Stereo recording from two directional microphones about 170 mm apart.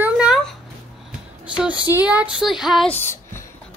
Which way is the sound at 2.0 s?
10° right (ahead or behind).